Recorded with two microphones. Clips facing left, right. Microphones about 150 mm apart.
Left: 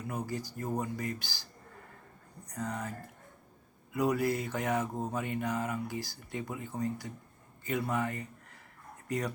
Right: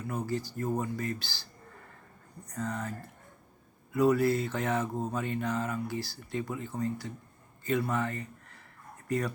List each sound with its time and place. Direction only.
0.1 s mantra: 15° left (ahead or behind)
2.5 s mantra: 15° left (ahead or behind)
3.9 s mantra: 15° left (ahead or behind)
7.6 s speech: 15° left (ahead or behind)